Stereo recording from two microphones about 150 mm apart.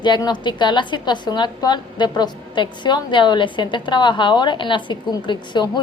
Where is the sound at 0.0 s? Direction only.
30° left (ahead or behind).